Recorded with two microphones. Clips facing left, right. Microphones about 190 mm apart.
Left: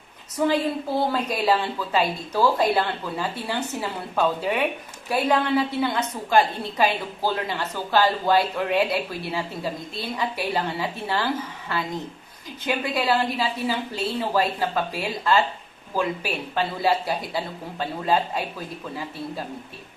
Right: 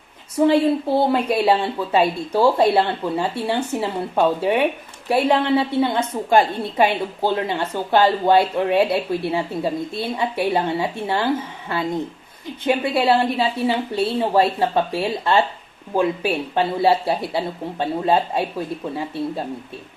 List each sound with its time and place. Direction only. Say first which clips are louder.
0.3 s speech: right 6 dB; 30° right (ahead or behind)
12.6 s speech: right 6 dB; 30° right (ahead or behind)